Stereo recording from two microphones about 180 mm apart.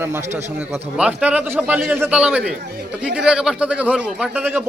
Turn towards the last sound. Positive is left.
turn(degrees=-10)  # may be behind; listen again after turning